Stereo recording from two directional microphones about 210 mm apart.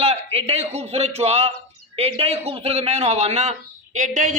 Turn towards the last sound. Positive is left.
turn(degrees=-35)  # may be behind; listen again after turning